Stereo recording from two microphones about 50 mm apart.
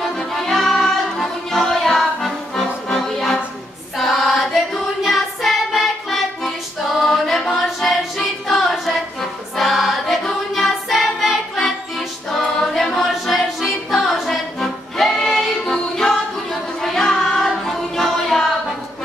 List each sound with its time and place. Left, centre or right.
0.3 s music: centre
7.5 s a capella: centre
8.5 s choir: centre
10.5 s a capella: centre
12.3 s music: centre